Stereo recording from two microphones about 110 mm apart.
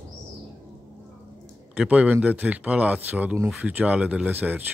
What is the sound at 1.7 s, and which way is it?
A man's voice, 10° right (ahead or behind).